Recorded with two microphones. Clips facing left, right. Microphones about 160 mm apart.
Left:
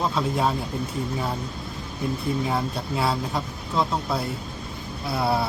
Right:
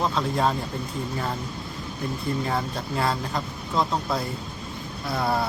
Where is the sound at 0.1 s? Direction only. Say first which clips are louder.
Even; 5° left (ahead or behind).